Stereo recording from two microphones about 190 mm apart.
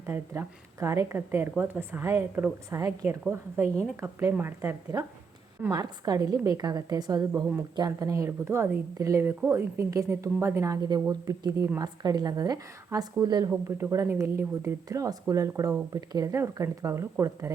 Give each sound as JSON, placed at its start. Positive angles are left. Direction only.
{"t": 0.0, "sound": "a woman's voice", "side_deg": -10}